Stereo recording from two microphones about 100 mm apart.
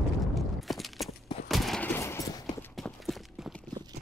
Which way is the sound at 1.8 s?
20° left (ahead or behind).